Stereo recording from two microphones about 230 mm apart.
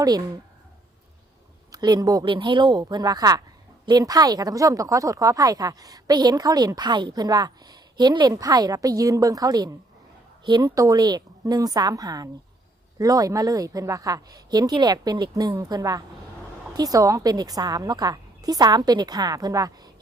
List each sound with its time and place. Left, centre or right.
1.7 s speech: centre